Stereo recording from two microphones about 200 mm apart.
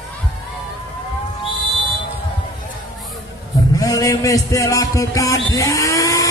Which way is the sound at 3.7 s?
15° left (ahead or behind).